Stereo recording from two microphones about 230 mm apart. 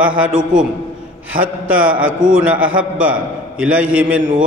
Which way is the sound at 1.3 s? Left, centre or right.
Right.